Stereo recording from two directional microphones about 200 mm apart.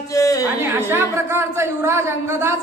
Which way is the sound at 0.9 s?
10° right (ahead or behind).